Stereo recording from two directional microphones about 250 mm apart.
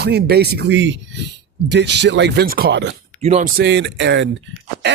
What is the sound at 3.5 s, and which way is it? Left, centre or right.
Speech, right.